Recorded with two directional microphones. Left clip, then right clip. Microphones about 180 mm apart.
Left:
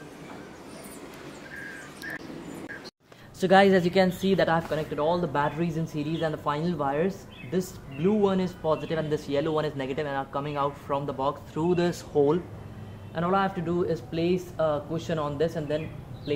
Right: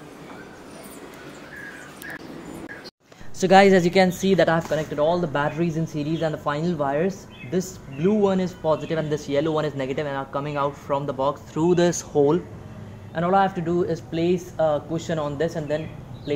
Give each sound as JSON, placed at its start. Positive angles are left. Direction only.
{"t": 3.3, "sound": "a man's voice", "side_deg": -20}